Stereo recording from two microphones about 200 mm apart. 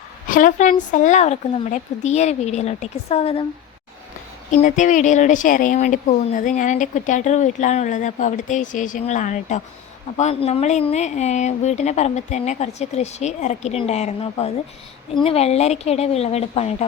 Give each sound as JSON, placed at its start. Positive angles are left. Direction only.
{"t": 0.3, "sound": "speech", "side_deg": 40}
{"t": 4.5, "sound": "speech", "side_deg": 40}